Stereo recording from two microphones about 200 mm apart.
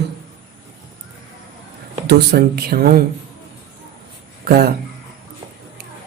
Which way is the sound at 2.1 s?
55° right (ahead or behind).